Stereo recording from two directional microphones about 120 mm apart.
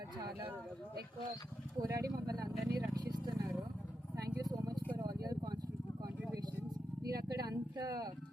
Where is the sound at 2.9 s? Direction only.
35° right (ahead or behind).